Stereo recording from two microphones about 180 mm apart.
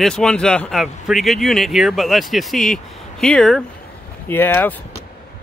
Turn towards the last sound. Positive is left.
turn(degrees=10)  # may be behind; listen again after turning